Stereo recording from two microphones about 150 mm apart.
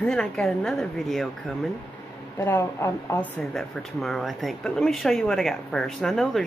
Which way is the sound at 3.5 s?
Centre (ahead or behind).